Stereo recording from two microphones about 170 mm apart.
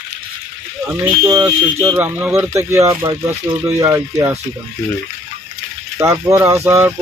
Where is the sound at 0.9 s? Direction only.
10° right (ahead or behind).